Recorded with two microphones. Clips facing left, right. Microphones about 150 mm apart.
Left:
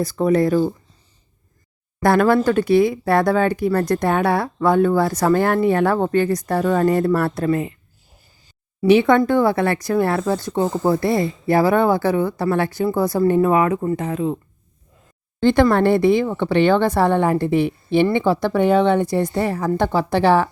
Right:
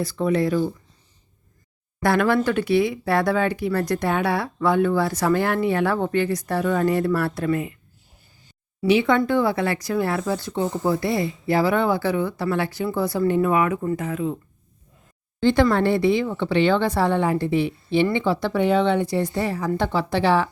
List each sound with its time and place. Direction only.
0.0 s speech: 45° left (ahead or behind)
2.0 s speech: 40° left (ahead or behind)
7.4 s speech: 35° left (ahead or behind)
8.8 s speech: 50° left (ahead or behind); by 14.3 s 30° left (ahead or behind)
15.4 s speech: 50° left (ahead or behind)